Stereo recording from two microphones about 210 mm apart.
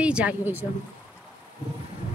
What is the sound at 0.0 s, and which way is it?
Speech, 5° right (ahead or behind).